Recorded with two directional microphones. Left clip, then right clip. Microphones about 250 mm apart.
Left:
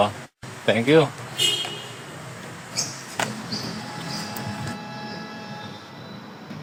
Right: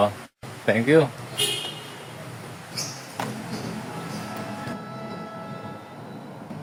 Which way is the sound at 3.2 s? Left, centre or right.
Left.